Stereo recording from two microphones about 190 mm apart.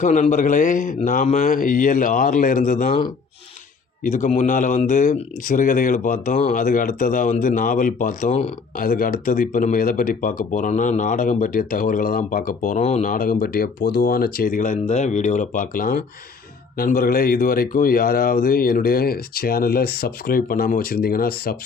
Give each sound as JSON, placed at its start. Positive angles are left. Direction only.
{"t": 0.0, "sound": "speech", "side_deg": 40}
{"t": 4.0, "sound": "speech", "side_deg": 40}